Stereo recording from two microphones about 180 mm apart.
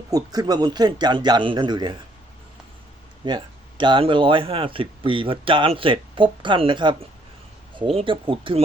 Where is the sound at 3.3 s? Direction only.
25° right (ahead or behind).